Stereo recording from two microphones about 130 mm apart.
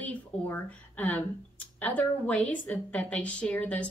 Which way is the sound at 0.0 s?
10° left (ahead or behind).